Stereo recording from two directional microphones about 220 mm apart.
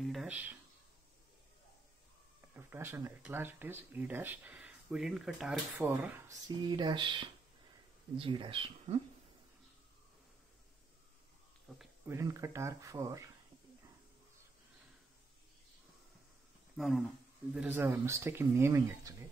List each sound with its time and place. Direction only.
0.0 s a sound: centre (ahead or behind)
2.5 s speech: 10° right (ahead or behind)
5.8 s speech: 10° right (ahead or behind)
11.7 s speech: centre (ahead or behind)
12.1 s speech: 10° right (ahead or behind)
16.7 s speech: centre (ahead or behind)